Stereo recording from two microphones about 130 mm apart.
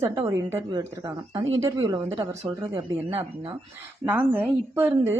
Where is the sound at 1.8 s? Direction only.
35° right (ahead or behind).